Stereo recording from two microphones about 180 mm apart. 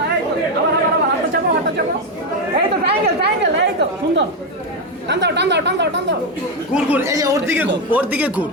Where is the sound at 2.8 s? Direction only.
70° right (ahead or behind).